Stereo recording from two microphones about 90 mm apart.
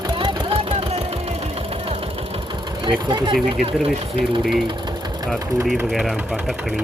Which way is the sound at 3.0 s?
60° right (ahead or behind).